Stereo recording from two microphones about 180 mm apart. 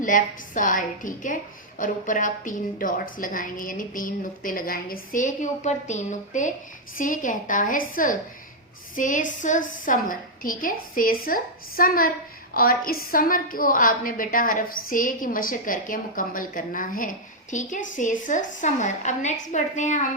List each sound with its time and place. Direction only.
0.0 s a woman's voice: 45° left (ahead or behind)